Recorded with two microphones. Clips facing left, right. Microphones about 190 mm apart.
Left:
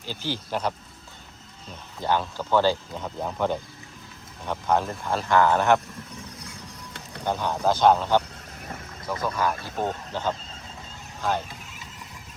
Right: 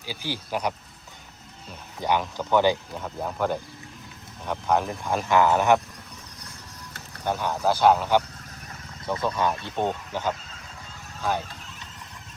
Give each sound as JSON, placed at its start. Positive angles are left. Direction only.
{"t": 0.0, "sound": "speech", "side_deg": -10}
{"t": 2.0, "sound": "speech", "side_deg": -15}
{"t": 3.2, "sound": "speech", "side_deg": 0}
{"t": 7.3, "sound": "speech", "side_deg": -10}
{"t": 9.0, "sound": "speech", "side_deg": -25}